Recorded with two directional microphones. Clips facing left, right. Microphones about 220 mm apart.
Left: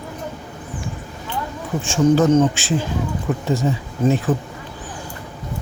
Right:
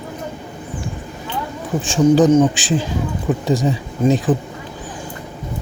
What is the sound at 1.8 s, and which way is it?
Speech, 15° right (ahead or behind).